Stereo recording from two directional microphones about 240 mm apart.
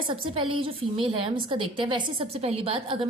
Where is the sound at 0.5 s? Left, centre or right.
Right.